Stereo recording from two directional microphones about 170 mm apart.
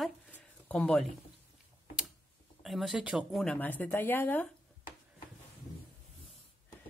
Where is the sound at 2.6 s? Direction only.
Centre (ahead or behind).